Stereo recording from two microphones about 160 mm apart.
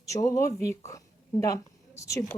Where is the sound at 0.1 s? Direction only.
20° left (ahead or behind).